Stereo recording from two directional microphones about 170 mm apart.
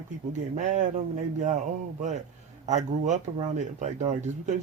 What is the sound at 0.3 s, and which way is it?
Speech, 45° right (ahead or behind).